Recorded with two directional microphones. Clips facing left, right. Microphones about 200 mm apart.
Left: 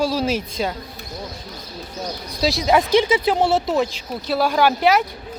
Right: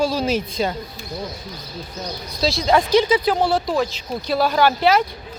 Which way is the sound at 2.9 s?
25° left (ahead or behind).